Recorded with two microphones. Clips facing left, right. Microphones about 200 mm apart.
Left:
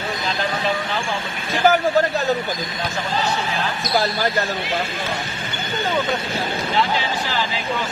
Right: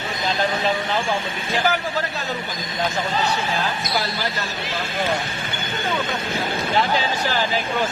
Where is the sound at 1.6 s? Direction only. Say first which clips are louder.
Left 9 dB; 45° left (ahead or behind).